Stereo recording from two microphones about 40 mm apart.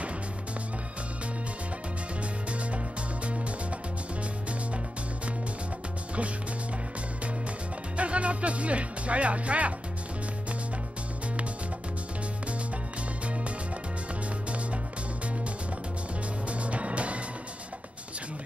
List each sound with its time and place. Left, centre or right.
8.0 s speech: right
16.4 s music: right